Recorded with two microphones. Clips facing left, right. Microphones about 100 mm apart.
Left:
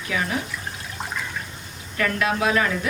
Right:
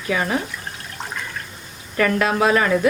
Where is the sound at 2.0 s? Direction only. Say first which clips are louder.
Right 5 dB; 40° right (ahead or behind).